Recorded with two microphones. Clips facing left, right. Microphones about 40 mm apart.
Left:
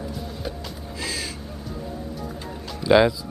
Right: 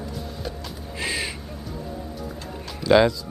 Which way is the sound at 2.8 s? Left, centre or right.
Centre.